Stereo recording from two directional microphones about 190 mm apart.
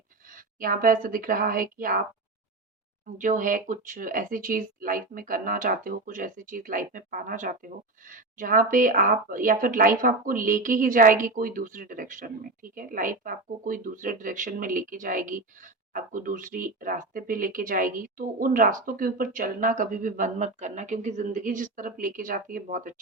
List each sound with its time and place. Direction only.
0.3 s speech: 45° right (ahead or behind)
3.2 s speech: 45° right (ahead or behind)